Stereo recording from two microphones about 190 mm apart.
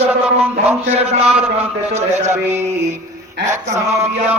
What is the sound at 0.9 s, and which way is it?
Speech, 30° right (ahead or behind).